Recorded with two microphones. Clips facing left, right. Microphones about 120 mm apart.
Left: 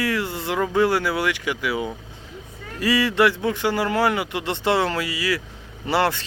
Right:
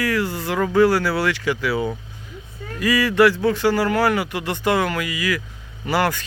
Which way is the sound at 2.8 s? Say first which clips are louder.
Right 3 dB; 25° left (ahead or behind).